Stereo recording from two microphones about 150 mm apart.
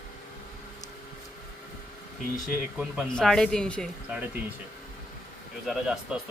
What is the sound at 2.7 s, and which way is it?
Speech, centre (ahead or behind).